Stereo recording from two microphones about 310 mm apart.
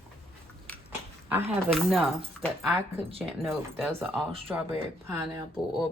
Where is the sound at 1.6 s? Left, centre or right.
Centre.